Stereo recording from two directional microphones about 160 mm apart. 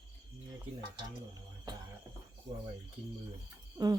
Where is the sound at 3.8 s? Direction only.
25° right (ahead or behind).